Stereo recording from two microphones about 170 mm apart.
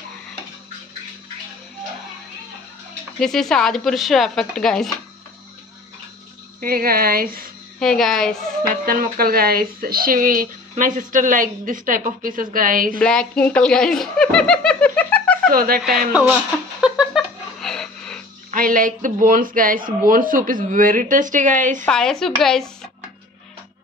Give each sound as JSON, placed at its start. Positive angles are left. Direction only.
{"t": 3.2, "sound": "speech", "side_deg": 5}
{"t": 6.6, "sound": "speech", "side_deg": -60}
{"t": 7.8, "sound": "speech", "side_deg": 5}
{"t": 8.8, "sound": "speech", "side_deg": -55}
{"t": 13.0, "sound": "speech", "side_deg": 5}
{"t": 15.5, "sound": "speech", "side_deg": -60}
{"t": 16.8, "sound": "a sound", "side_deg": -5}
{"t": 18.5, "sound": "speech", "side_deg": -55}
{"t": 21.8, "sound": "speech", "side_deg": 5}